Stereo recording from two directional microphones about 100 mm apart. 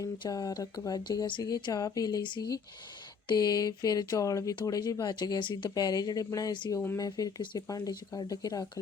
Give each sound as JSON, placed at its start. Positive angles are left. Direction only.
{"t": 0.3, "sound": "speech", "side_deg": 40}